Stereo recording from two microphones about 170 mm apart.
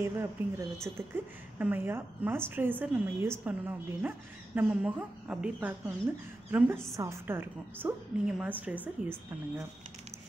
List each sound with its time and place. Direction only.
0.0 s a woman's voice: 15° right (ahead or behind)